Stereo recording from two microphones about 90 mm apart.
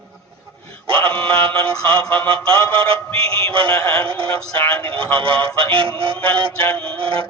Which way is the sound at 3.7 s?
25° left (ahead or behind).